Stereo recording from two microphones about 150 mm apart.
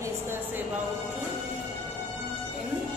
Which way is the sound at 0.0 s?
15° right (ahead or behind).